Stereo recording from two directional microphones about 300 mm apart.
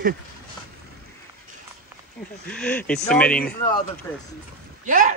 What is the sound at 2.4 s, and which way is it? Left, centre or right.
Speech, centre.